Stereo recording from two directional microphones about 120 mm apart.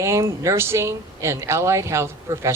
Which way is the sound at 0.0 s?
25° right (ahead or behind).